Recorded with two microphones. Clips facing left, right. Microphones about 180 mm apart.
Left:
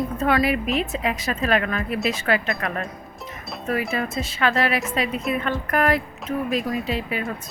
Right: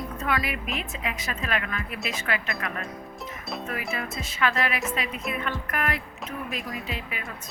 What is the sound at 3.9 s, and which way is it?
A woman's voice, 30° left (ahead or behind).